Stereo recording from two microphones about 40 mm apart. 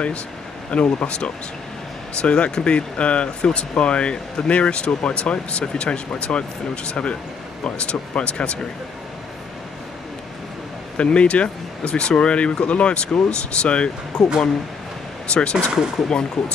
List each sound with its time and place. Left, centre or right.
0.7 s speech: left
11.0 s speech: left
15.3 s speech: left